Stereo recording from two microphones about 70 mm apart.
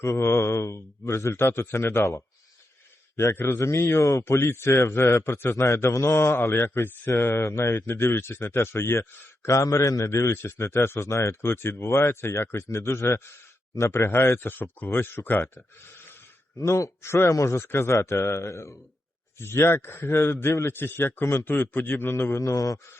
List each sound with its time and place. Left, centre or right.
0.0 s speech: left
3.3 s a man's voice: left
7.8 s speech: left
16.6 s speech: left
22.4 s speech: left